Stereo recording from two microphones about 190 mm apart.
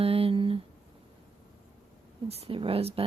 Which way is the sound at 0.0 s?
30° right (ahead or behind).